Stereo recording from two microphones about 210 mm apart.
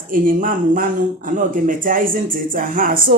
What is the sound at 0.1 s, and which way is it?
Speech, 40° right (ahead or behind).